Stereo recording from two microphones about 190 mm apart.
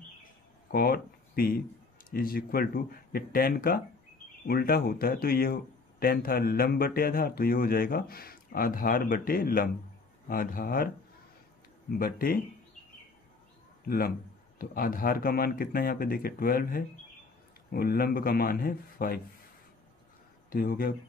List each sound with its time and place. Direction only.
0.7 s speech: 50° left (ahead or behind)
11.9 s speech: 50° left (ahead or behind)
13.8 s speech: 50° left (ahead or behind)
20.4 s speech: 50° left (ahead or behind)